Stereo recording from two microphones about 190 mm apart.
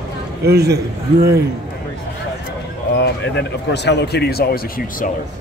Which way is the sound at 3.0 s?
65° left (ahead or behind).